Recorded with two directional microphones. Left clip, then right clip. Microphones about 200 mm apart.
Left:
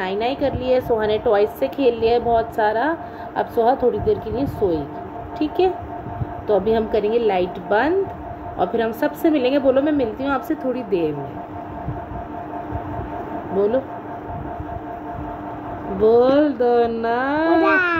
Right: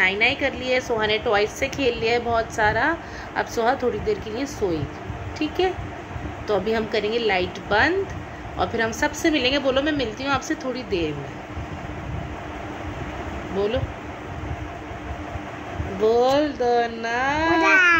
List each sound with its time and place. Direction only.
0.0 s a woman's voice: 20° left (ahead or behind)
6.7 s a woman's voice: 25° left (ahead or behind)
16.0 s a child's voice: 45° left (ahead or behind); by 17.8 s 30° left (ahead or behind)